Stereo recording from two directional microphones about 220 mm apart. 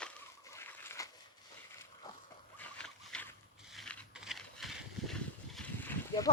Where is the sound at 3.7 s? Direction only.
Centre (ahead or behind).